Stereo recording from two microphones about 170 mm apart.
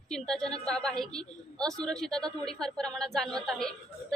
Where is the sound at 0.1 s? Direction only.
5° left (ahead or behind).